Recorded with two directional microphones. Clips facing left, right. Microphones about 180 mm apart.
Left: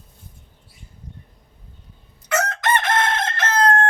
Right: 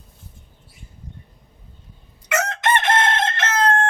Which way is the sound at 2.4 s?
25° right (ahead or behind).